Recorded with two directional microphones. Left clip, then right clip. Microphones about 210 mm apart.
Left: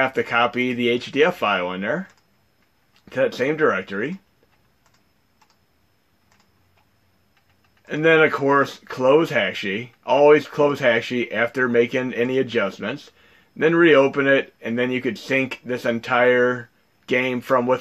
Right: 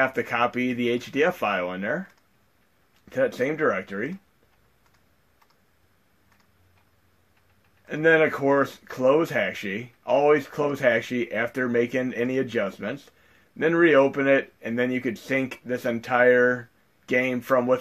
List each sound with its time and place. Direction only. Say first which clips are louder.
0.0 s speech: left 4 dB; 35° left (ahead or behind)
3.1 s speech: left 3 dB; 40° left (ahead or behind)
7.8 s speech: left 3 dB; 40° left (ahead or behind)